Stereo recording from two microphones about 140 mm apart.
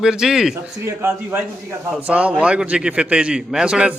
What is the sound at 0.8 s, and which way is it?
A man's voice, 20° right (ahead or behind).